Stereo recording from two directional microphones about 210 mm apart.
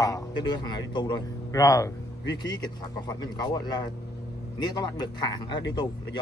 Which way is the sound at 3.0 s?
20° left (ahead or behind).